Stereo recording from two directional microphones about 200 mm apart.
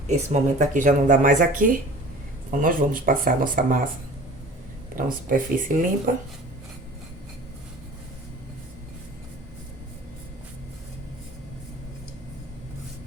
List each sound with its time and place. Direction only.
0.1 s speech: 35° right (ahead or behind)
4.9 s speech: 45° right (ahead or behind)